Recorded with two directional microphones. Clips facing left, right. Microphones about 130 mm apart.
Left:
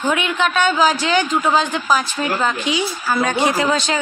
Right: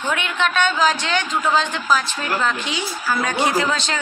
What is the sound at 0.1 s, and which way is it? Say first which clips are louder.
Speech: left 1 dB; 5° left (ahead or behind).